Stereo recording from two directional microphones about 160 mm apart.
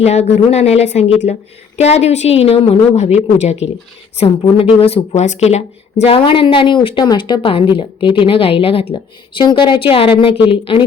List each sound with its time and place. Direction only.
0.0 s speech: 45° left (ahead or behind)
4.8 s a woman's voice: 35° left (ahead or behind)